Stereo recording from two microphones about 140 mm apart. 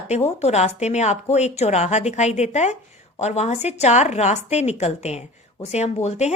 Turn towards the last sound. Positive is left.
turn(degrees=50)  # may be behind; listen again after turning